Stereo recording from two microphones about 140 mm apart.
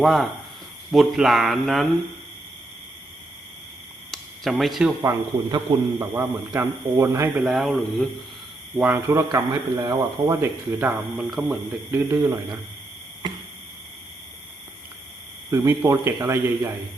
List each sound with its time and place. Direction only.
0.0 s speech: centre (ahead or behind)
4.1 s a sound: centre (ahead or behind)
5.0 s a man's voice: 25° right (ahead or behind)
7.4 s speech: centre (ahead or behind)
8.8 s a man's voice: 15° right (ahead or behind)
10.8 s speech: 5° right (ahead or behind)
11.9 s a man's voice: 20° right (ahead or behind)
15.4 s a man's voice: 20° right (ahead or behind)